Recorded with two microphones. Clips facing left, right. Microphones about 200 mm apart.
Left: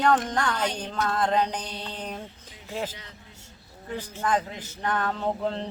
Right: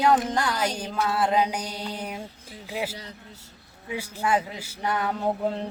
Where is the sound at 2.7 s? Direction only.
10° right (ahead or behind).